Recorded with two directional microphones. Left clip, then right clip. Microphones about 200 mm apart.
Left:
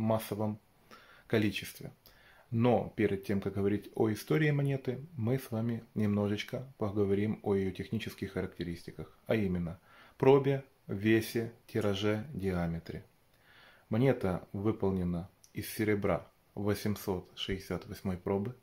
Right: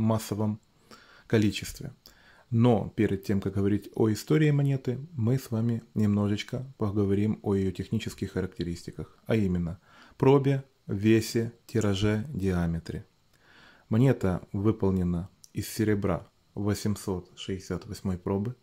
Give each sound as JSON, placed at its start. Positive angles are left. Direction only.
{"t": 0.0, "sound": "speech", "side_deg": -30}